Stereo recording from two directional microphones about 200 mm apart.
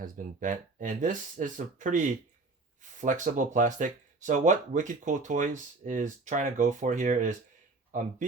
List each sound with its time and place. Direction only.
0.0 s speech: 40° right (ahead or behind)